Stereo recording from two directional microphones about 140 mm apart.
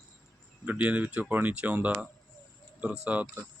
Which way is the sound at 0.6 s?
10° right (ahead or behind).